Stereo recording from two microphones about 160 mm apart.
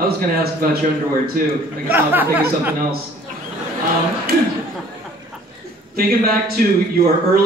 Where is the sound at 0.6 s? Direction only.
65° right (ahead or behind).